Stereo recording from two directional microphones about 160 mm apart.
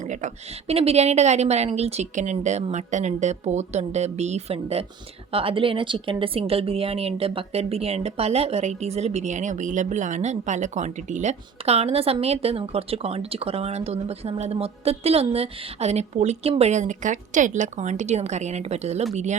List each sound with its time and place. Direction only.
0.0 s a woman's voice: 50° right (ahead or behind)